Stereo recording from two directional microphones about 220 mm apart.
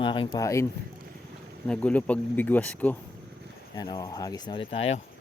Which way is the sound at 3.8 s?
15° left (ahead or behind).